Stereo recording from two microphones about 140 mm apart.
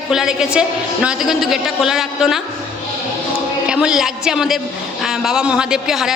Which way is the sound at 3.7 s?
5° right (ahead or behind).